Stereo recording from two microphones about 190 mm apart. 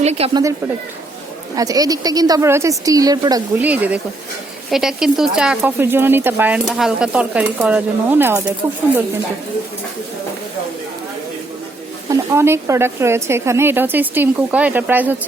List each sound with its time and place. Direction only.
0.0 s speech: 35° right (ahead or behind)
1.5 s a woman's voice: 20° right (ahead or behind)
3.6 s speech: 10° right (ahead or behind)
12.1 s speech: 15° right (ahead or behind)